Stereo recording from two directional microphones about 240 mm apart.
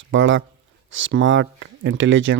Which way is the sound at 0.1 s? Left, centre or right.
Right.